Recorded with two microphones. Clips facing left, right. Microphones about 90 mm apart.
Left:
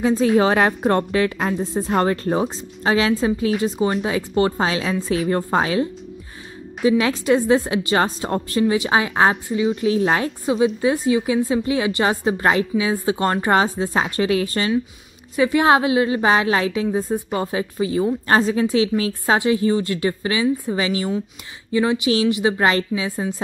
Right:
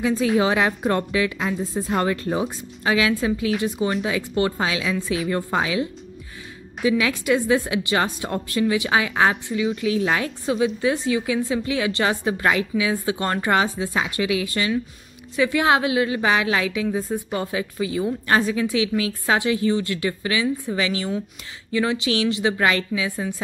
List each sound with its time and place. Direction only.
0.0 s a woman's voice: 35° left (ahead or behind)
6.9 s a woman's voice: 35° left (ahead or behind)
10.8 s a woman's voice: 25° left (ahead or behind)
15.3 s a woman's voice: 30° left (ahead or behind)